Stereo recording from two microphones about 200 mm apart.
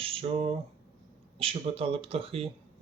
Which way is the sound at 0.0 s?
25° right (ahead or behind).